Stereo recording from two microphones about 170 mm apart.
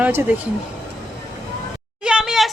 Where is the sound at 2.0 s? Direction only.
5° right (ahead or behind).